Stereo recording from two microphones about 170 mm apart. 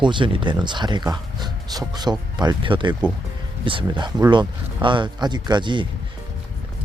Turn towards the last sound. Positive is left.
turn(degrees=-25)  # may be behind; listen again after turning